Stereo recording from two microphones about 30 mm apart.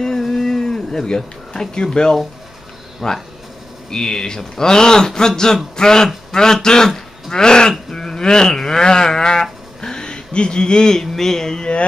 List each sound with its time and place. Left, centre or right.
0.2 s livestock: centre
3.0 s sheep: left
9.8 s speech: left